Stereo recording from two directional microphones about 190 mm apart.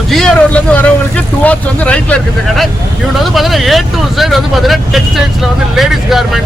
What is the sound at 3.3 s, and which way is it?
Speech, centre (ahead or behind).